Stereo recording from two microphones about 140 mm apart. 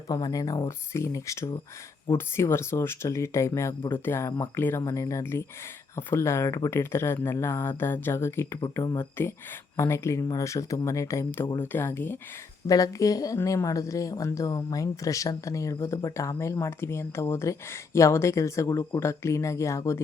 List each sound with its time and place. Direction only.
0.1 s a woman's voice: 25° left (ahead or behind)